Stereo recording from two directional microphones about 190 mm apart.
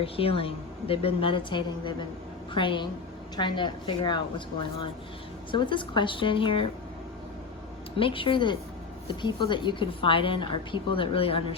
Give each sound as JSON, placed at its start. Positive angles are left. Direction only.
{"t": 0.0, "sound": "a woman's voice", "side_deg": 30}
{"t": 7.9, "sound": "a woman's voice", "side_deg": 30}